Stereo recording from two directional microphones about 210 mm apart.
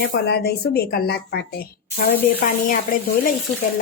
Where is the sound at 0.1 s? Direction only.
50° left (ahead or behind).